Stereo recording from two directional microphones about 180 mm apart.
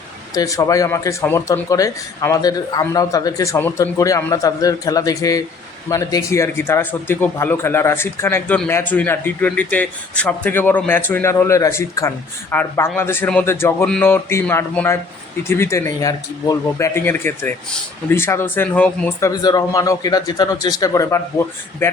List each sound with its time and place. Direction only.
0.3 s speech: 20° left (ahead or behind)